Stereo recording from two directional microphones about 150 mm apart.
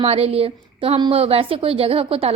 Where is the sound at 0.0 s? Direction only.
40° right (ahead or behind).